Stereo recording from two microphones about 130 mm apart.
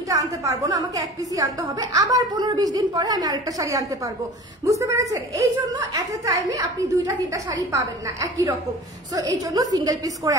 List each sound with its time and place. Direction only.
0.1 s a woman's voice: 25° right (ahead or behind)